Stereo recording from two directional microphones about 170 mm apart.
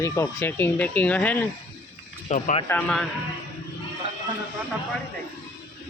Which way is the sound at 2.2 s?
35° left (ahead or behind).